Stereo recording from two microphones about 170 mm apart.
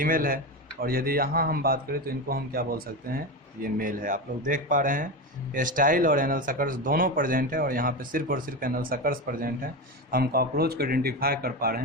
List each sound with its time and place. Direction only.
0.0 s speech: 55° right (ahead or behind)